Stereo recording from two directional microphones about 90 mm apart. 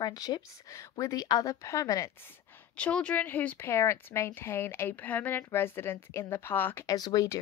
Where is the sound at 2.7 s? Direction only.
10° left (ahead or behind).